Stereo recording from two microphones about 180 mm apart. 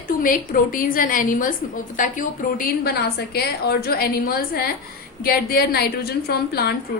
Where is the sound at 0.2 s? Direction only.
50° left (ahead or behind).